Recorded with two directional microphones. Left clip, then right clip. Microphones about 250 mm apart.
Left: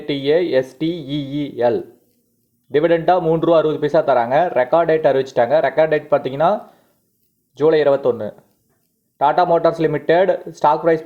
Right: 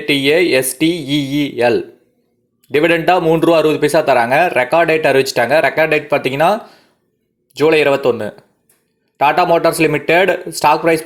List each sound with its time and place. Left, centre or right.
0.0 s speech: centre